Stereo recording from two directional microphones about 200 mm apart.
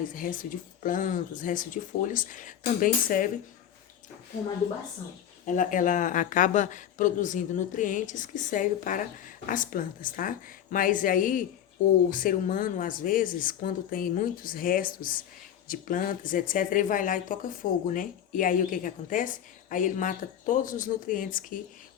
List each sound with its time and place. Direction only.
0.0 s speech: 40° left (ahead or behind)
5.5 s speech: 40° left (ahead or behind)